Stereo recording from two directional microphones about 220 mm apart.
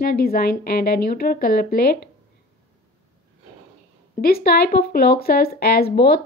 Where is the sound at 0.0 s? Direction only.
45° left (ahead or behind).